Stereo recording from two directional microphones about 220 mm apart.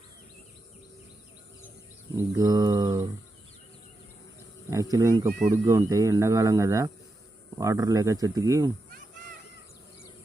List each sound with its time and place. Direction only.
2.1 s mantra: 15° right (ahead or behind)
4.7 s speech: 15° right (ahead or behind)